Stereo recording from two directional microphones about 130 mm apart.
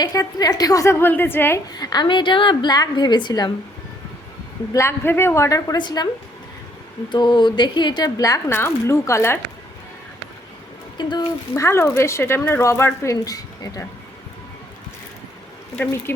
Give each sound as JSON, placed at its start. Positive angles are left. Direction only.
{"t": 0.0, "sound": "speech", "side_deg": 30}
{"t": 1.7, "sound": "a woman's voice", "side_deg": 30}
{"t": 4.7, "sound": "speech", "side_deg": 20}
{"t": 7.1, "sound": "a woman's voice", "side_deg": 35}
{"t": 11.0, "sound": "a woman's voice", "side_deg": 35}
{"t": 11.5, "sound": "speech", "side_deg": 20}
{"t": 15.8, "sound": "speech", "side_deg": 15}